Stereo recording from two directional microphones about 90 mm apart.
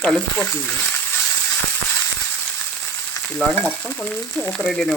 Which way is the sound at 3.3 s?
20° left (ahead or behind).